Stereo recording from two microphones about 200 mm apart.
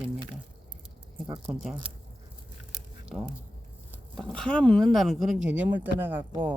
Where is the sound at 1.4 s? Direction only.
5° right (ahead or behind).